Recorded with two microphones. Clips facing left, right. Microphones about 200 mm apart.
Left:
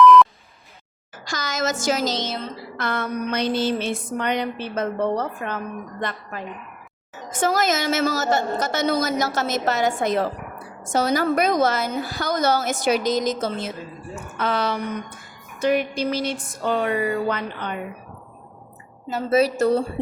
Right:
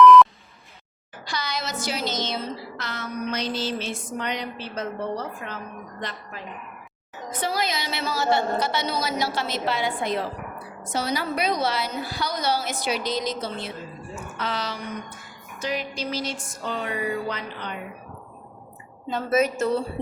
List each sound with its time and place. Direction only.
0.0 s beep: centre (ahead or behind)
1.2 s a woman's voice: 45° left (ahead or behind)
2.7 s a sound: 55° left (ahead or behind)
6.0 s a woman's voice: 55° left (ahead or behind)
15.6 s a sound: 55° left (ahead or behind)
19.3 s speech: 35° left (ahead or behind)